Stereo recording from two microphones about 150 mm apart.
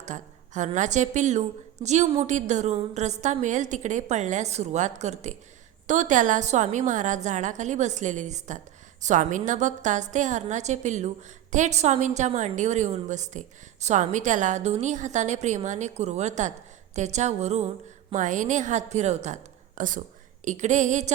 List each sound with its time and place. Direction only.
0.0 s a woman's voice: 55° right (ahead or behind)